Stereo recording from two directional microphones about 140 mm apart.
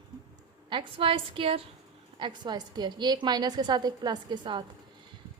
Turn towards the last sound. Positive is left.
turn(degrees=-35)  # may be behind; listen again after turning